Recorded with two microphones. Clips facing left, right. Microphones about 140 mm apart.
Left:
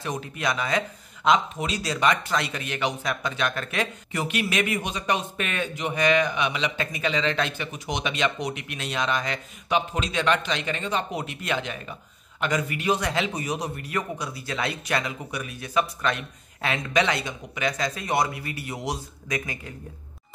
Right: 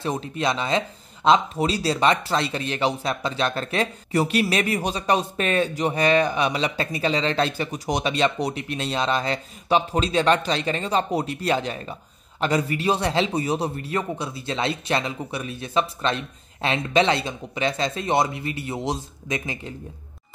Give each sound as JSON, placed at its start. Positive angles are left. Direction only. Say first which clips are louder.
{"t": 0.0, "sound": "a man's voice", "louder": "right 4 dB", "side_deg": -30}